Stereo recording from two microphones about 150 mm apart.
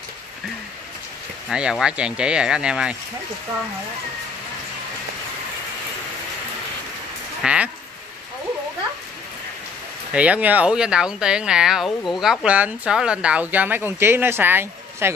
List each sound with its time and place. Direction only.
1.5 s speech: 5° right (ahead or behind)
7.4 s speech: 10° right (ahead or behind)
10.1 s speech: 10° right (ahead or behind)